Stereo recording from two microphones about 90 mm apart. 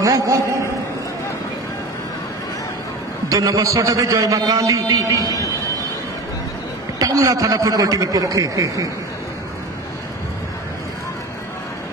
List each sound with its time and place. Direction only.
0.0 s a man's voice: 35° right (ahead or behind)
3.3 s a man's voice: 40° right (ahead or behind)
7.0 s a man's voice: 40° right (ahead or behind)